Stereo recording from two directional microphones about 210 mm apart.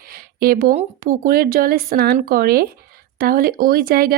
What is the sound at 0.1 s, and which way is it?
A woman's voice, 45° right (ahead or behind).